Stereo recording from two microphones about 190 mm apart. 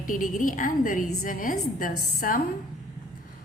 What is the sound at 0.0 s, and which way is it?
A woman's voice, 45° left (ahead or behind).